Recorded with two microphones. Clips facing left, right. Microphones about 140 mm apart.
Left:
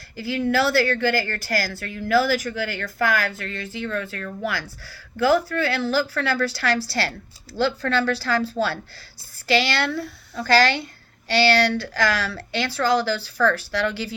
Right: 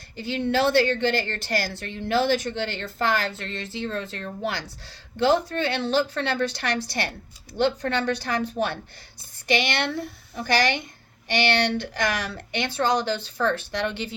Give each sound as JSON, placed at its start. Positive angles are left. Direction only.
{"t": 0.2, "sound": "a woman's voice", "side_deg": -25}